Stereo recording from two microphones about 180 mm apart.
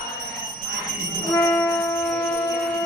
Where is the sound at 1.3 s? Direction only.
10° left (ahead or behind).